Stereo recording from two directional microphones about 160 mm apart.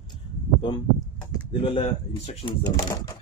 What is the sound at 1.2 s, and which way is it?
Speech, 25° left (ahead or behind).